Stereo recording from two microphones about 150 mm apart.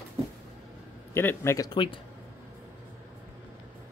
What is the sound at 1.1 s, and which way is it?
Speech, 15° left (ahead or behind).